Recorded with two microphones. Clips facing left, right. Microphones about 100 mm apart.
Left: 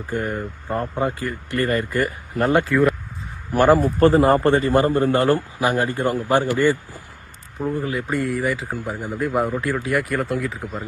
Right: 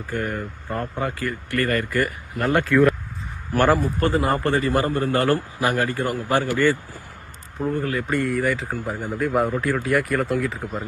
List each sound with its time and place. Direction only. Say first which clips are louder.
0.1 s a man's voice: left 2 dB; 20° left (ahead or behind)
2.6 s speech: right 1 dB; 5° left (ahead or behind)
3.5 s speech: left 3 dB; 15° left (ahead or behind)
3.8 s a man's voice: left 6 dB; 30° left (ahead or behind)
7.6 s speech: even; 5° left (ahead or behind)